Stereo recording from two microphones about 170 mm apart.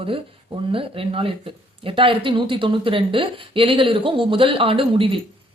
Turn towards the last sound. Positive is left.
turn(degrees=-30)  # may be behind; listen again after turning